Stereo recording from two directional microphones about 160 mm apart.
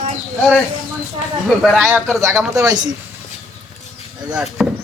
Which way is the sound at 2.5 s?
25° right (ahead or behind).